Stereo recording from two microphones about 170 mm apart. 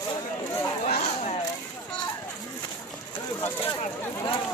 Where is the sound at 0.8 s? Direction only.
40° left (ahead or behind).